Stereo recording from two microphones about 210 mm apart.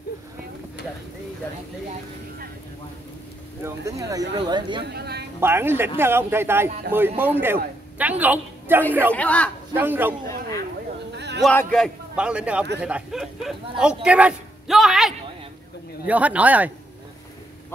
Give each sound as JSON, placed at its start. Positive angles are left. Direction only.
{"t": 1.9, "sound": "music", "side_deg": -45}
{"t": 3.6, "sound": "speech", "side_deg": -15}
{"t": 4.8, "sound": "speech", "side_deg": -50}
{"t": 5.4, "sound": "a woman's voice", "side_deg": -10}
{"t": 9.1, "sound": "a man's voice", "side_deg": 5}
{"t": 9.8, "sound": "speech", "side_deg": -10}
{"t": 11.1, "sound": "a sound", "side_deg": -55}
{"t": 11.4, "sound": "a man's voice", "side_deg": 0}